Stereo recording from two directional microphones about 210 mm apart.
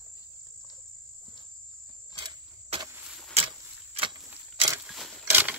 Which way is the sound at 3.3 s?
25° right (ahead or behind).